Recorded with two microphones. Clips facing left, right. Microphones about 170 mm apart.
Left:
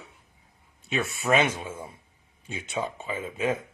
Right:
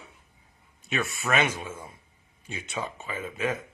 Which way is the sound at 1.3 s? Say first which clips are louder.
Left 4 dB; 15° left (ahead or behind).